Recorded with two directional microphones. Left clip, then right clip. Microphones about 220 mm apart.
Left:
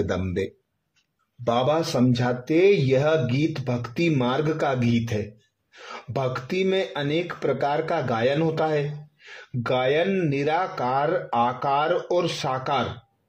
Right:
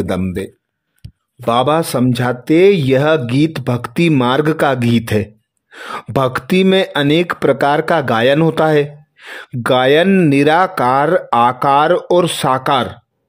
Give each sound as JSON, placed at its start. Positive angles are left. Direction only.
{"t": 0.0, "sound": "speech", "side_deg": -30}
{"t": 1.4, "sound": "speech", "side_deg": -45}